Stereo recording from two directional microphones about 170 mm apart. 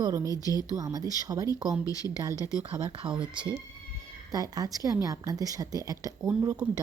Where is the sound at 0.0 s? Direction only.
20° right (ahead or behind).